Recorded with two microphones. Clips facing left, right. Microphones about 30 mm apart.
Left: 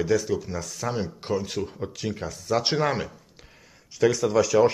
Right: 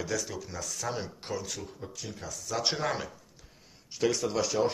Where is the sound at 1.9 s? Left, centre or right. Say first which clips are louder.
Left 10 dB; left.